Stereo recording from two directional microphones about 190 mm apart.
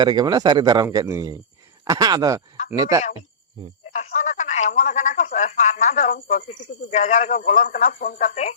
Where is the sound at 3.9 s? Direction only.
40° left (ahead or behind).